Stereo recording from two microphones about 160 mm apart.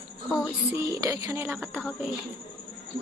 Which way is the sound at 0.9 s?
20° right (ahead or behind).